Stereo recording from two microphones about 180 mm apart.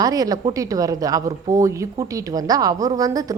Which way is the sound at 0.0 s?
20° right (ahead or behind).